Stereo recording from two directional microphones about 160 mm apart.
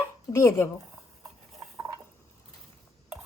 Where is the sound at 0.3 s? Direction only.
15° left (ahead or behind).